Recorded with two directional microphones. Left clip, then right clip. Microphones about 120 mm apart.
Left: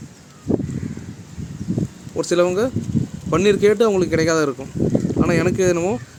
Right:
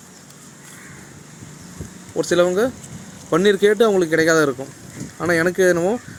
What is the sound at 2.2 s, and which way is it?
Speech, 15° left (ahead or behind).